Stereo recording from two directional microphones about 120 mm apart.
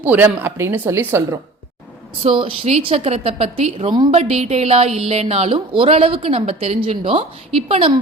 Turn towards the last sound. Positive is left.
turn(degrees=-55)  # may be behind; listen again after turning